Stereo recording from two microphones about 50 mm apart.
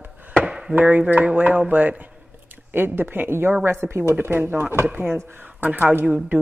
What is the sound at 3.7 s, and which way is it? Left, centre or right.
Speech, right.